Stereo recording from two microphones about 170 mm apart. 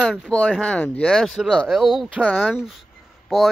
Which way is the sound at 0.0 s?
Centre (ahead or behind).